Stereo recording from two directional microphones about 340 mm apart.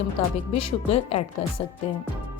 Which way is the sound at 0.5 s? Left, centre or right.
Centre.